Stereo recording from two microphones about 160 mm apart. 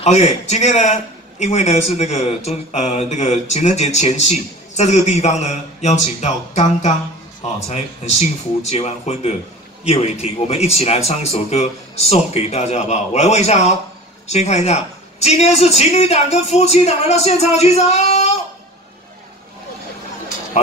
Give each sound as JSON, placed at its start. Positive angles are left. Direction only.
{"t": 0.0, "sound": "a man's voice", "side_deg": 45}